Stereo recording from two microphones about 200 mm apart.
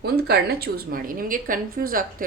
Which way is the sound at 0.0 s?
50° right (ahead or behind).